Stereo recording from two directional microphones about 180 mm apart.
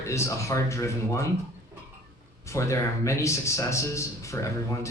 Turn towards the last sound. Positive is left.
turn(degrees=15)  # may be behind; listen again after turning